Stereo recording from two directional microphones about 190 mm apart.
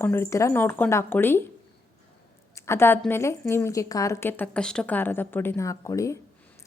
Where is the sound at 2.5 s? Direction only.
15° left (ahead or behind).